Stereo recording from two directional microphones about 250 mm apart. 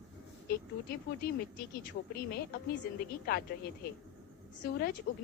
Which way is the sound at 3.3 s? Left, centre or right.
Left.